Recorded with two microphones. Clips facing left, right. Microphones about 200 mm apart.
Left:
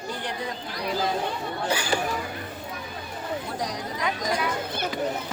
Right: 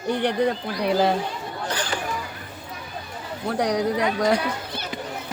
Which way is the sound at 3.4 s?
65° right (ahead or behind).